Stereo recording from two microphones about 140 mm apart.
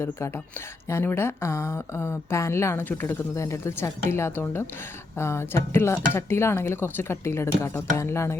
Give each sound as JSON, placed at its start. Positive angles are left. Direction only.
{"t": 0.9, "sound": "speech", "side_deg": 15}